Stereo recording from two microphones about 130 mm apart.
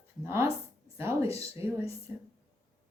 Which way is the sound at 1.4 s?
15° right (ahead or behind).